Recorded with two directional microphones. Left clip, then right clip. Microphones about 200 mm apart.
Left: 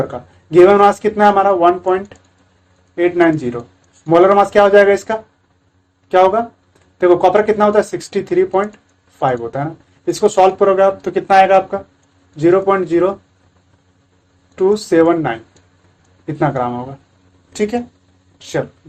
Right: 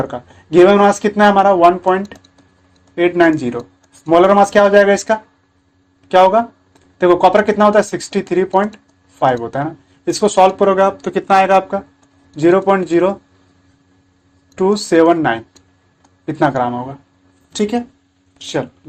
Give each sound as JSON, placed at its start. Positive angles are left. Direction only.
{"t": 0.1, "sound": "speech", "side_deg": -20}
{"t": 14.5, "sound": "speech", "side_deg": -20}